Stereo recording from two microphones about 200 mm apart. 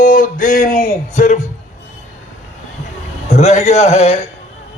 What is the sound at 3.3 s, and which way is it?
Speech, 30° left (ahead or behind).